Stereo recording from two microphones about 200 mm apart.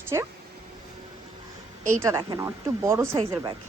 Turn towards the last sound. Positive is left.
turn(degrees=-15)  # may be behind; listen again after turning